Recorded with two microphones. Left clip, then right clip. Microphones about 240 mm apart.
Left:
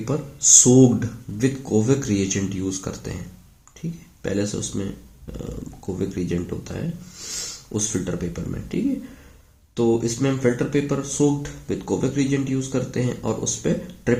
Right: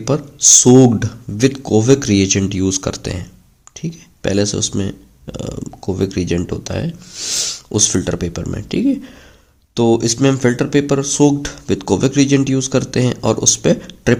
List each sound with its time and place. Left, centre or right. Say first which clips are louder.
0.0 s speech: right 8 dB; right